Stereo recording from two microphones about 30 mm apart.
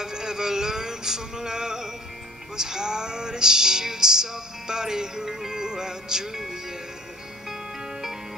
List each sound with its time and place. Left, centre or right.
0.0 s music: right